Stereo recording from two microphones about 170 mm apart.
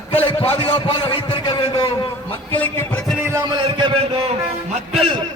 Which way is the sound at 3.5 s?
30° right (ahead or behind).